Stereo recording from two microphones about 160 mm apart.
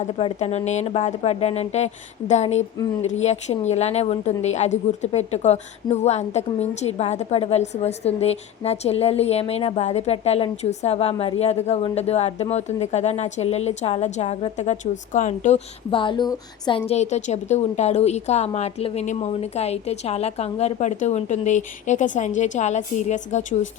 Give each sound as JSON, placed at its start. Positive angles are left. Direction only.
{"t": 0.0, "sound": "a woman's voice", "side_deg": 40}